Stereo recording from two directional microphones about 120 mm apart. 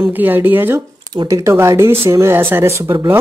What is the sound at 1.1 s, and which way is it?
Speech, 30° right (ahead or behind).